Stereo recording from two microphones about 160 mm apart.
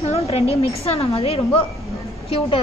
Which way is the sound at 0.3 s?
40° left (ahead or behind).